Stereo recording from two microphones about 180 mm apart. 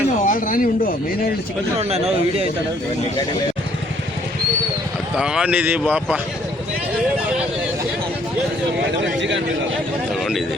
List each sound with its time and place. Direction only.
0.3 s speech: 50° left (ahead or behind)
1.8 s a man's voice: 35° right (ahead or behind)
5.1 s speech: 5° right (ahead or behind)